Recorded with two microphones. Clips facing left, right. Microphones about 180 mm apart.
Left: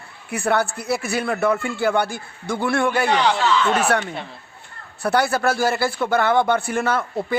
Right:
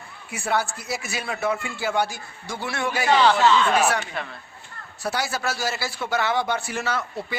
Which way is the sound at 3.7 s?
60° left (ahead or behind).